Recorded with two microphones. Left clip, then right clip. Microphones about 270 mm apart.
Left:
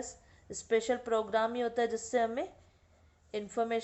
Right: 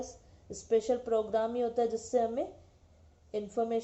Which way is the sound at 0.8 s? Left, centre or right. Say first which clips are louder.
Right 2 dB; left.